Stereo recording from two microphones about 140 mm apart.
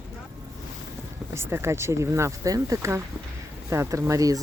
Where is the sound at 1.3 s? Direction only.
20° right (ahead or behind).